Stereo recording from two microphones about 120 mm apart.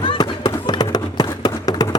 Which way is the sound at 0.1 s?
40° left (ahead or behind).